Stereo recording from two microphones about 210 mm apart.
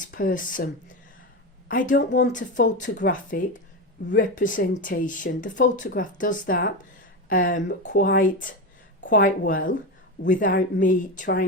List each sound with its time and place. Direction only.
0.1 s speech: 40° left (ahead or behind)
1.7 s speech: 40° left (ahead or behind)